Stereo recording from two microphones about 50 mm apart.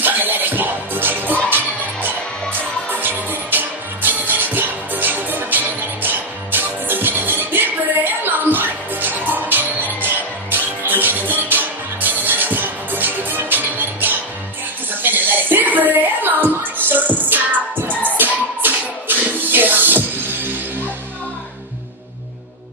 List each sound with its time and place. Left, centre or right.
0.0 s music: right